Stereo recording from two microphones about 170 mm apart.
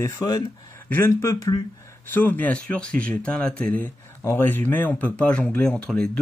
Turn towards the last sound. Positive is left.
turn(degrees=5)  # may be behind; listen again after turning